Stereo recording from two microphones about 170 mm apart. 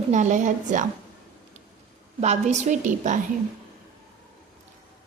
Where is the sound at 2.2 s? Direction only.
40° right (ahead or behind).